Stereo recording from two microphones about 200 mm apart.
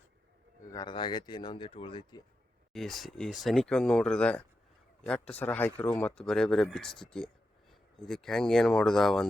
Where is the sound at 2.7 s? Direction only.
Centre (ahead or behind).